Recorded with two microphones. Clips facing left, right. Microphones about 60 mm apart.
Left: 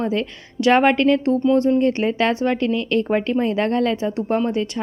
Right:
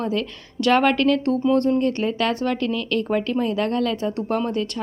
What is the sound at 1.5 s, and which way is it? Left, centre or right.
Speech, centre.